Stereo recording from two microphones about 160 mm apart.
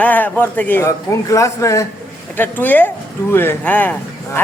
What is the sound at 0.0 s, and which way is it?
A man's voice, 10° left (ahead or behind).